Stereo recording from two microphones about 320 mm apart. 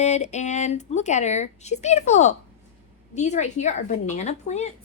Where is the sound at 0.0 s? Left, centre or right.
Left.